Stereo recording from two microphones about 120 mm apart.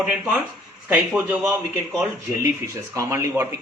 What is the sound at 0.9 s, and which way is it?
Speech, 15° right (ahead or behind).